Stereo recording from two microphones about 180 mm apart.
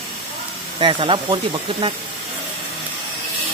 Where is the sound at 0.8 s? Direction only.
30° right (ahead or behind).